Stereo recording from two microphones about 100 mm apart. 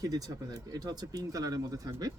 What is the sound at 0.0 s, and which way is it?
Speech, 40° right (ahead or behind).